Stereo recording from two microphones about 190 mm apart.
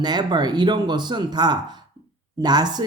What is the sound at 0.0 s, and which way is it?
Speech, 20° right (ahead or behind).